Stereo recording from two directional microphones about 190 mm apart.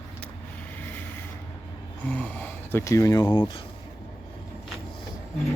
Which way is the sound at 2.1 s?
5° left (ahead or behind).